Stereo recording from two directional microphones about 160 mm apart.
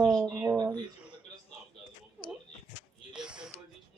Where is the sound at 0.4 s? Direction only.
20° right (ahead or behind).